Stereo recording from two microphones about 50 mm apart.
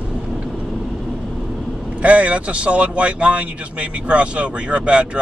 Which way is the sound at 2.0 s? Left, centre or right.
Right.